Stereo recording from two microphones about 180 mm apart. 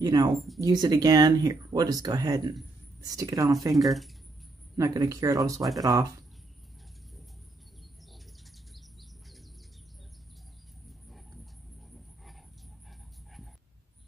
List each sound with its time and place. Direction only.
0.0 s speech: 20° right (ahead or behind)
3.7 s speech: centre (ahead or behind)
4.7 s speech: 20° right (ahead or behind)
10.9 s a sound: centre (ahead or behind)